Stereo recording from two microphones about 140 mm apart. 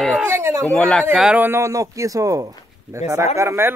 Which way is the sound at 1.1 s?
10° right (ahead or behind).